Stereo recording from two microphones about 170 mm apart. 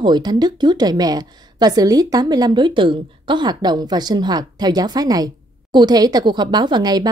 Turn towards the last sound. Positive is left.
turn(degrees=-25)  # may be behind; listen again after turning